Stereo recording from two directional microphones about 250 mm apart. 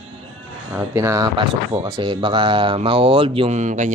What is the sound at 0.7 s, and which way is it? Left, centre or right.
Speech, centre.